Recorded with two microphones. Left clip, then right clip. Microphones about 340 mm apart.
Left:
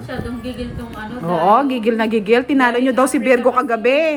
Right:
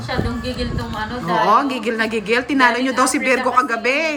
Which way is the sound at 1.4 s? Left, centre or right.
Centre.